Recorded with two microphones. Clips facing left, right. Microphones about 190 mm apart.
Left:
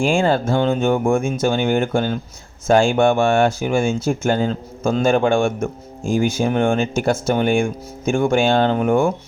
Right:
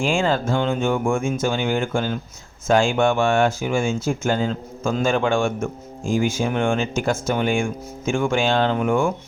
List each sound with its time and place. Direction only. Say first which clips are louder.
0.2 s speech: left 3 dB; 35° left (ahead or behind)